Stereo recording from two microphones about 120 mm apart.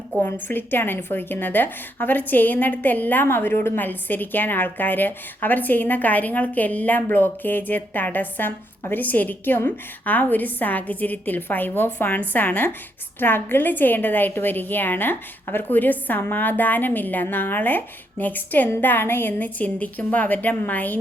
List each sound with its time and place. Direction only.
0.4 s a woman's voice: 15° left (ahead or behind)